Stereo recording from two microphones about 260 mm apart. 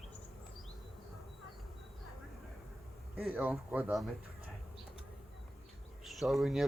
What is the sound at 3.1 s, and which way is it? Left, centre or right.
Speech, centre.